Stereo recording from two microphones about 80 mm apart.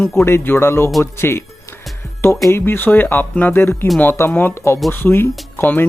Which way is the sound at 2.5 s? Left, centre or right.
Left.